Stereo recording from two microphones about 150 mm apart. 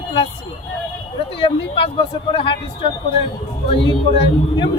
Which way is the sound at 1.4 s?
35° left (ahead or behind).